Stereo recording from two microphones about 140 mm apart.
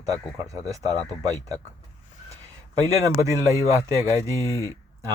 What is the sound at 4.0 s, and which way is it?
Speech, 20° left (ahead or behind).